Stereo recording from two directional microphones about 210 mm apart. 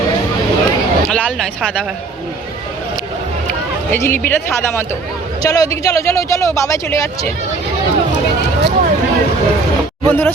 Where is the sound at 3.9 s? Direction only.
10° left (ahead or behind).